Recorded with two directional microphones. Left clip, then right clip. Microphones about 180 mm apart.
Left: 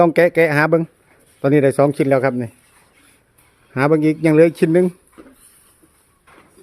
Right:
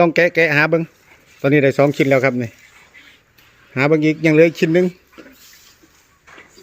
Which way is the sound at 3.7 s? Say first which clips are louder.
Even; 10° left (ahead or behind).